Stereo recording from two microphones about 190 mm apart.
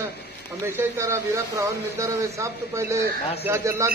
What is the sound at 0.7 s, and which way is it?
A man's voice, 15° right (ahead or behind).